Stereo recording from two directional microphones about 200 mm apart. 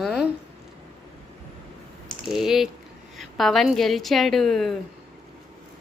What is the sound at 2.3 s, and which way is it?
A woman's voice, centre (ahead or behind).